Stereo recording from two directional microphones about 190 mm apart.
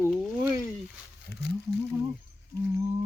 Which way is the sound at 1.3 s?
55° left (ahead or behind).